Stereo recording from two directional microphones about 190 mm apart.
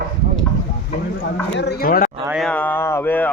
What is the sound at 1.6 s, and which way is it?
Speech, 55° left (ahead or behind).